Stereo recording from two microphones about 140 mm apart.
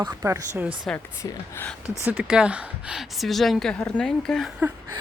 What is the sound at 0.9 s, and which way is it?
Speech, 20° left (ahead or behind).